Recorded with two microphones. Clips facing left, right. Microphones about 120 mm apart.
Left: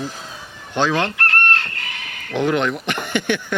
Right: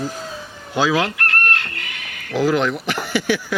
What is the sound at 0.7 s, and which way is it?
Speech, 5° right (ahead or behind).